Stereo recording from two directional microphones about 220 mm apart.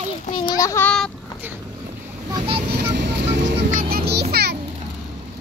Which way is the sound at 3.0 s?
50° right (ahead or behind).